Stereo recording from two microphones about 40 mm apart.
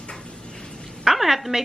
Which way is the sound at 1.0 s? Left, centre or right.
Centre.